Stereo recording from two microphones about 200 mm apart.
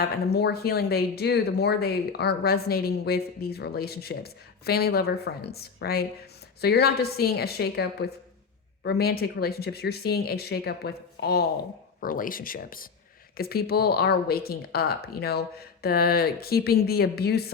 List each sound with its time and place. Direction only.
0.0 s speech: 55° left (ahead or behind)